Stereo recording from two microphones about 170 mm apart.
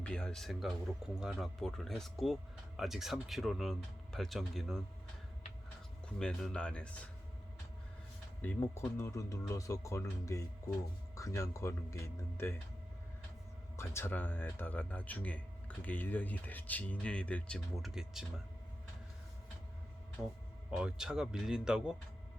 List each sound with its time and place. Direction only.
0.0 s speech: 5° left (ahead or behind)
6.1 s speech: 5° left (ahead or behind)
8.4 s speech: 10° left (ahead or behind)
13.7 s speech: 15° left (ahead or behind); by 18.3 s centre (ahead or behind)
20.2 s speech: centre (ahead or behind)